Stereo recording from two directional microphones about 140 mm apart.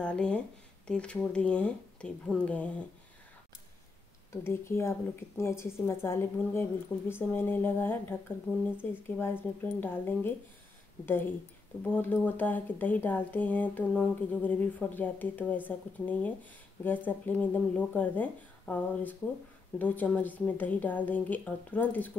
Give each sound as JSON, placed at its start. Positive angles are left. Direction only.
{"t": 0.0, "sound": "speech", "side_deg": 5}
{"t": 4.3, "sound": "speech", "side_deg": 15}